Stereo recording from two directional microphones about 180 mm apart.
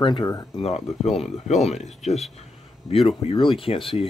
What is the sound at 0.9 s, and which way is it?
Speech, 35° left (ahead or behind).